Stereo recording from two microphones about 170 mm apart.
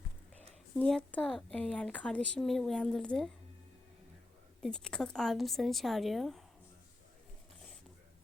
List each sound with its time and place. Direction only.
0.8 s a woman's voice: 5° left (ahead or behind)
4.6 s a woman's voice: 5° left (ahead or behind)